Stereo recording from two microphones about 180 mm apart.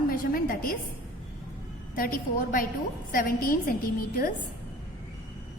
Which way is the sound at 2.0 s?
50° left (ahead or behind).